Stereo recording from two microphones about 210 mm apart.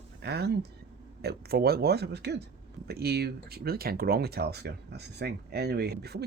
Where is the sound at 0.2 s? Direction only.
50° right (ahead or behind).